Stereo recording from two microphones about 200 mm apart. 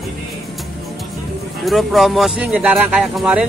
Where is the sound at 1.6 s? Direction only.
Centre (ahead or behind).